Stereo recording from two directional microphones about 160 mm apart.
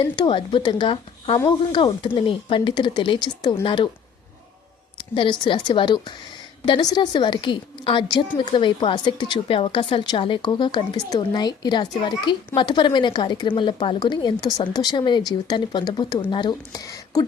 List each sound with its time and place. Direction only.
0.0 s speech: 30° left (ahead or behind)
4.9 s a woman's voice: 30° left (ahead or behind)